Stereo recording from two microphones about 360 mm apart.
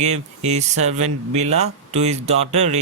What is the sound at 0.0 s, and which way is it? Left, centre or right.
Speech, centre.